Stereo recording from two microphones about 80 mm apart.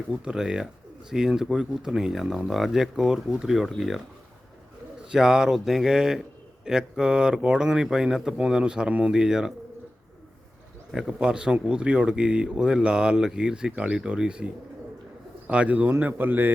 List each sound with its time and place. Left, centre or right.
0.1 s speech: centre
5.1 s speech: centre
10.9 s speech: centre
15.4 s speech: centre